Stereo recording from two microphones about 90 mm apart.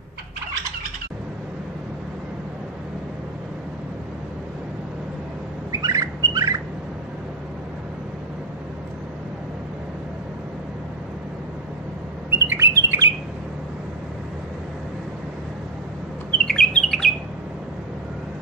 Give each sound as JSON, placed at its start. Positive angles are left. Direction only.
{"t": 5.7, "sound": "squawk", "side_deg": -40}
{"t": 12.3, "sound": "bird", "side_deg": -25}
{"t": 16.3, "sound": "bird", "side_deg": 10}